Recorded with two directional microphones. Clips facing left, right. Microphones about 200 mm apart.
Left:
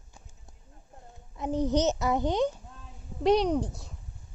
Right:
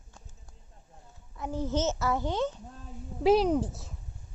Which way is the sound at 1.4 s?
20° left (ahead or behind).